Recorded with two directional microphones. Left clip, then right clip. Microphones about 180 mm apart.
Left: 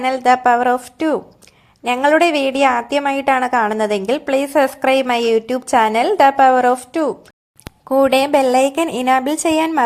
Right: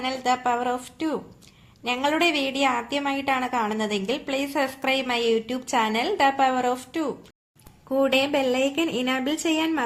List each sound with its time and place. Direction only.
0.0 s a woman's voice: 45° left (ahead or behind)